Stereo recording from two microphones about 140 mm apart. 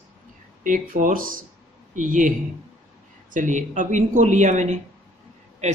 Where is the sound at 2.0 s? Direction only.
70° right (ahead or behind).